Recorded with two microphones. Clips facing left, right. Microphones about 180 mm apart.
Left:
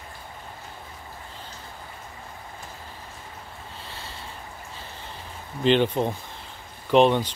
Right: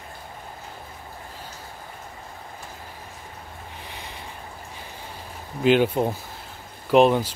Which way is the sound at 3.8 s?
15° right (ahead or behind).